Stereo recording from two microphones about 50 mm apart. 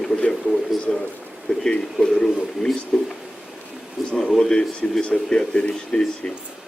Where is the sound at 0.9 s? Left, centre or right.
Centre.